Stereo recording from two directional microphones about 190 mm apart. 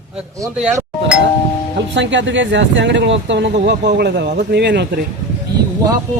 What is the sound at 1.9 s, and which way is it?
Speech, 70° right (ahead or behind).